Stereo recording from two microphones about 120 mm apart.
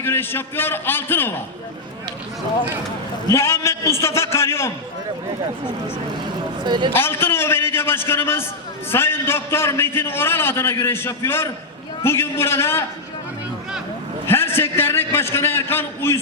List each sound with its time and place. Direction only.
0.0 s a man's voice: 20° left (ahead or behind)
3.3 s a man's voice: 20° left (ahead or behind)
6.7 s a man's voice: 40° right (ahead or behind)
6.9 s a man's voice: 20° left (ahead or behind)
14.3 s a man's voice: 20° left (ahead or behind)